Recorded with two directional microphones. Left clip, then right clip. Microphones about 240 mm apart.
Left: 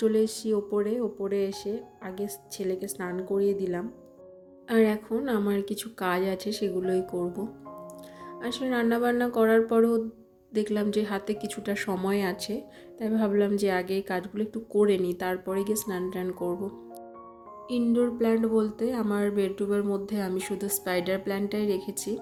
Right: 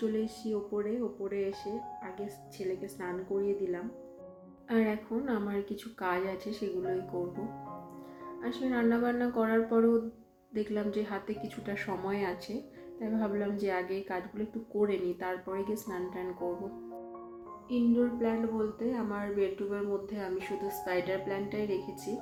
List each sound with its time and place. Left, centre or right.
0.0 s a woman's voice: left
8.4 s a woman's voice: left
17.7 s a woman's voice: left